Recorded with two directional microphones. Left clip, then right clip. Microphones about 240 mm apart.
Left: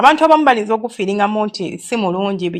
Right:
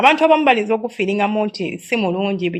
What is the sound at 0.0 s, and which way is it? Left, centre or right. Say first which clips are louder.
Speech: left 3 dB; left.